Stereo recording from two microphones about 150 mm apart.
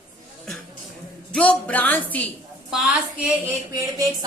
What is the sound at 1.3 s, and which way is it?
Speech, 5° left (ahead or behind).